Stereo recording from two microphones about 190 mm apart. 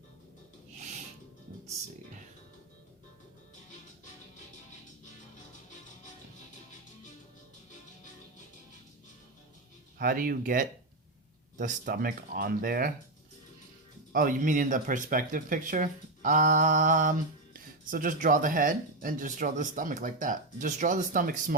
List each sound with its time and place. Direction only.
10.0 s speech: 50° right (ahead or behind)
14.1 s speech: 45° right (ahead or behind)